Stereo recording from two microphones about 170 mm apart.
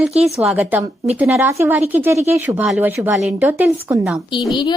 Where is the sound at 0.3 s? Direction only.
5° right (ahead or behind).